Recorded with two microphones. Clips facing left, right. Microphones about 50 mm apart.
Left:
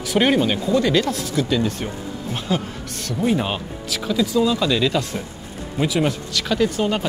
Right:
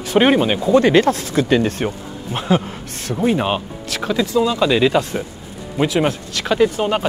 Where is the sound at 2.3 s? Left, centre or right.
Right.